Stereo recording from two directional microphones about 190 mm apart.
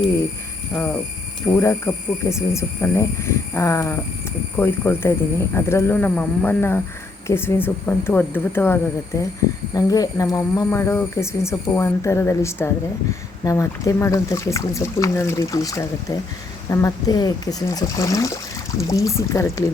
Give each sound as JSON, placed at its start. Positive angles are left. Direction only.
{"t": 1.5, "sound": "speech", "side_deg": 15}